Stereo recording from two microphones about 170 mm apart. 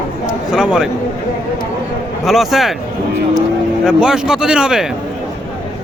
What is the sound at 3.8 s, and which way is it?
A man's voice, 5° right (ahead or behind).